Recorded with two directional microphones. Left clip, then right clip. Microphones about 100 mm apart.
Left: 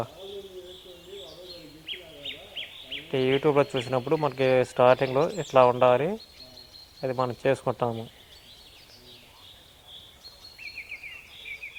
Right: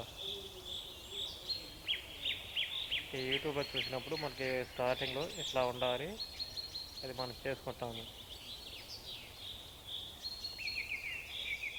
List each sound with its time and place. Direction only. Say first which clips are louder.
1.9 s bird: left 1 dB; 40° left (ahead or behind)
3.1 s speech: left 14 dB; 25° left (ahead or behind)